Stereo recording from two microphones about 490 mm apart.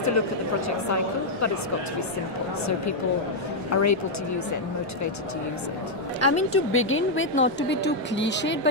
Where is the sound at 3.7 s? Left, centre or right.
Left.